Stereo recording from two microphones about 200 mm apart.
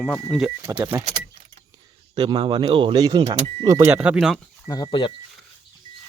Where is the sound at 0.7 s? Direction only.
15° right (ahead or behind).